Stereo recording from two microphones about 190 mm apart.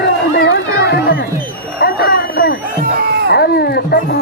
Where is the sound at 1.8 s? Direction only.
50° left (ahead or behind).